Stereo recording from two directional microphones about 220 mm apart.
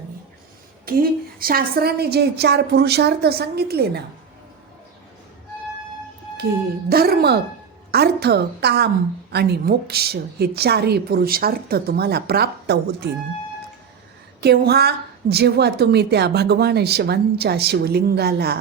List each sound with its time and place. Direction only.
0.9 s a woman's voice: 40° right (ahead or behind)
6.9 s a woman's voice: 45° right (ahead or behind)
14.4 s a woman's voice: 45° right (ahead or behind)